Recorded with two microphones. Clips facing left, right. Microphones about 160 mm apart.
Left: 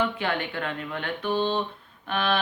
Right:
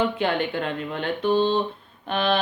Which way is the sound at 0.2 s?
25° right (ahead or behind).